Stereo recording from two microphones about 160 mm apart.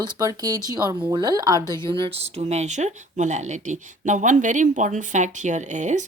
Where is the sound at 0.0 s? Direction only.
25° right (ahead or behind).